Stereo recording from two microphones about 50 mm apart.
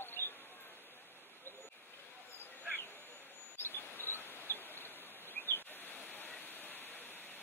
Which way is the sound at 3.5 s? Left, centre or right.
Left.